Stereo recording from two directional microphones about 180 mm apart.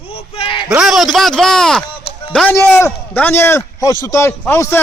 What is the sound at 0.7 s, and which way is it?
A man's voice, centre (ahead or behind).